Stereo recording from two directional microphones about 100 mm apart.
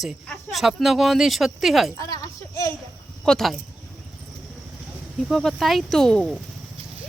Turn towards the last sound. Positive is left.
turn(degrees=5)  # may be behind; listen again after turning